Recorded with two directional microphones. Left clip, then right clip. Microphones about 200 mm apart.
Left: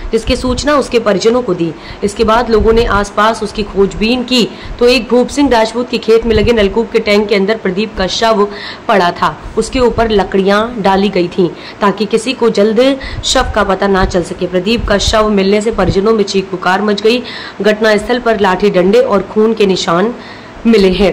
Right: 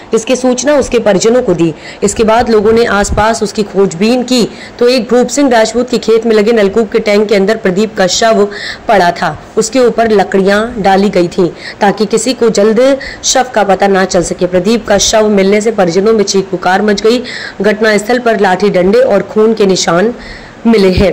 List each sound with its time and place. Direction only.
0.1 s a woman's voice: 10° right (ahead or behind)
4.7 s a woman's voice: 15° right (ahead or behind)